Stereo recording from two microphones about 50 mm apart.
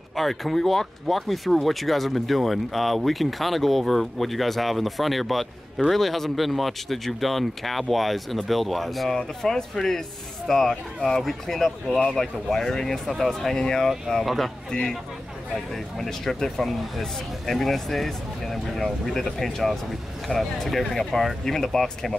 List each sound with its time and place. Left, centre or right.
0.1 s speech: centre
14.2 s speech: centre
14.7 s speech: centre